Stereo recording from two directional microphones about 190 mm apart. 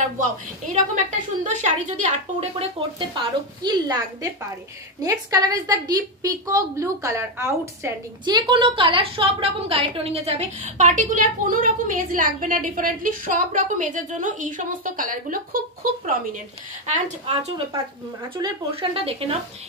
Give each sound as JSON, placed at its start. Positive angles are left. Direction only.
{"t": 1.4, "sound": "a woman's voice", "side_deg": -40}
{"t": 3.2, "sound": "a woman's voice", "side_deg": -20}
{"t": 16.8, "sound": "a woman's voice", "side_deg": -35}